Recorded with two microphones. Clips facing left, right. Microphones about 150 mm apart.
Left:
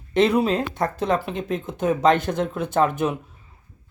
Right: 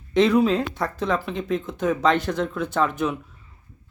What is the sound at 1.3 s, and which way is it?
Speech, 45° left (ahead or behind).